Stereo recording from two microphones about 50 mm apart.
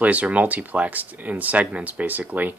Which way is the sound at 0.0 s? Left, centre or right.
Right.